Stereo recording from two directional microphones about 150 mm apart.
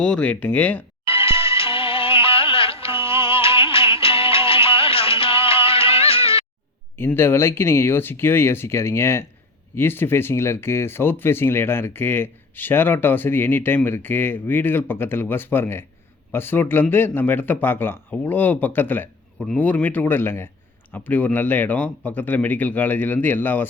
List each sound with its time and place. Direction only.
0.0 s speech: 5° left (ahead or behind)
1.0 s music: 40° left (ahead or behind)
6.9 s speech: 15° left (ahead or behind)